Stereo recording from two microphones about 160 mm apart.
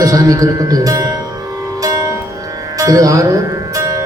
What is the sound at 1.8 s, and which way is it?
Music, 20° right (ahead or behind).